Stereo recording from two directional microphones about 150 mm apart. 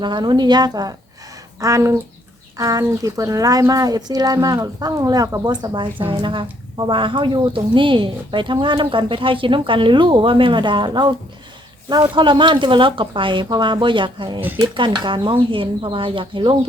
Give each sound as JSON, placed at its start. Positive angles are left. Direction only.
{"t": 0.0, "sound": "a woman's voice", "side_deg": -30}
{"t": 12.1, "sound": "a woman's voice", "side_deg": -30}
{"t": 14.4, "sound": "speech", "side_deg": -15}
{"t": 14.8, "sound": "a woman's voice", "side_deg": -35}